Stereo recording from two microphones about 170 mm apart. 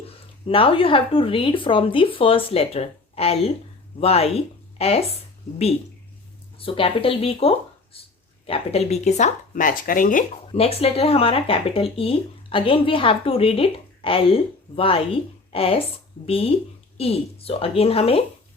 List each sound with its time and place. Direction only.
0.4 s speech: 30° left (ahead or behind)
6.6 s speech: 30° left (ahead or behind); by 10.2 s 55° left (ahead or behind)
10.5 s speech: 35° left (ahead or behind)